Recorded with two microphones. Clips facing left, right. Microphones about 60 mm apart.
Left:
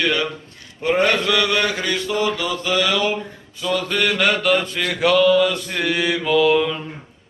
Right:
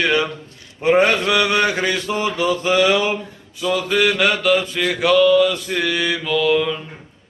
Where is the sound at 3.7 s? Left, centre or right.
Centre.